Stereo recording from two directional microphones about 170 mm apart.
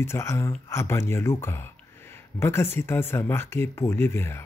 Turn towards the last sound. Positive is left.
turn(degrees=15)  # may be behind; listen again after turning